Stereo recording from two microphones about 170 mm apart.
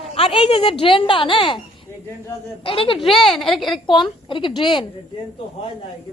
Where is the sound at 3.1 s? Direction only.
Centre (ahead or behind).